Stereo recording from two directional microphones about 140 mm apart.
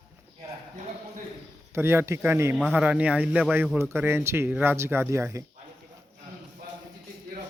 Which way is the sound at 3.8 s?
15° right (ahead or behind).